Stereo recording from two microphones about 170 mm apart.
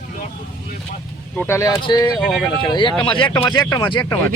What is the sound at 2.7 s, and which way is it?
A man's voice, 25° left (ahead or behind).